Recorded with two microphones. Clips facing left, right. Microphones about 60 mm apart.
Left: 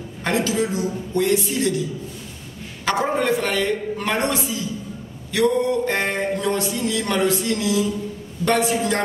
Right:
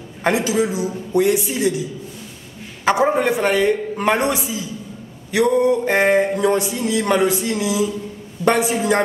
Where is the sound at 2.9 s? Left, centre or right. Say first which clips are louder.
Right 2 dB; centre.